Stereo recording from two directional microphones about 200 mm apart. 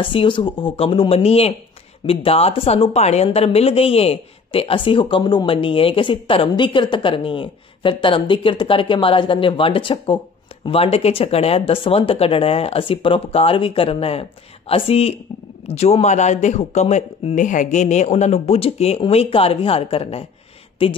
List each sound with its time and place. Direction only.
0.0 s a woman's voice: 25° left (ahead or behind)